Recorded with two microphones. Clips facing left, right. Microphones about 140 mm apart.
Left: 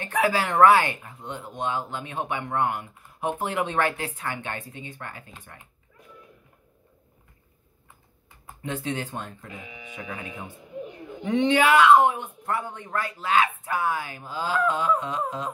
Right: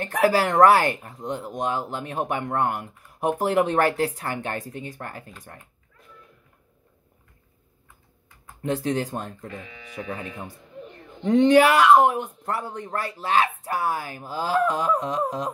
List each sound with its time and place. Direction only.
0.0 s speech: 40° right (ahead or behind)
8.6 s speech: 40° right (ahead or behind)
9.5 s speech: 10° left (ahead or behind)
9.9 s speech: 35° right (ahead or behind)
10.2 s a sound: 5° left (ahead or behind)
11.2 s speech: 45° right (ahead or behind)